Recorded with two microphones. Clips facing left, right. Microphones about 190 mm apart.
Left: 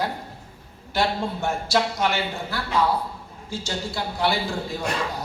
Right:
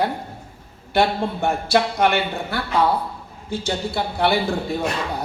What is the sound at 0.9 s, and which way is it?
A man's voice, 60° right (ahead or behind).